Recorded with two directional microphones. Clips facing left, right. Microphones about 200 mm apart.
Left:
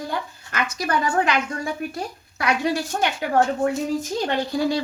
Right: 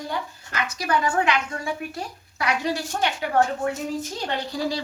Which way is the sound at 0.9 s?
40° left (ahead or behind).